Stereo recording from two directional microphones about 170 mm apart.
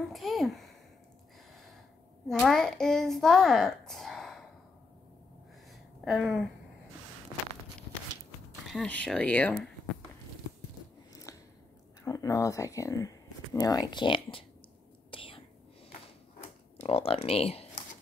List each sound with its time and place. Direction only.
0.1 s a child's voice: centre (ahead or behind)
2.2 s a child's voice: centre (ahead or behind)
6.0 s a child's voice: centre (ahead or behind)
8.6 s speech: 5° left (ahead or behind)
11.3 s a sound: 20° left (ahead or behind)
12.0 s speech: 20° left (ahead or behind)
15.0 s whispering: 30° left (ahead or behind)
16.8 s speech: 35° left (ahead or behind)